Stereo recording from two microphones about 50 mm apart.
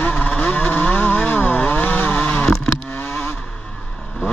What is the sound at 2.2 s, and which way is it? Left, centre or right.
Vehicle, centre.